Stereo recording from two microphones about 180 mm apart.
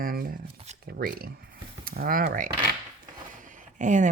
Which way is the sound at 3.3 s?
45° right (ahead or behind).